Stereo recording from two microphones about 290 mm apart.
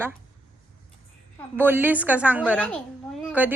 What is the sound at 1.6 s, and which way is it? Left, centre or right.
Speech, centre.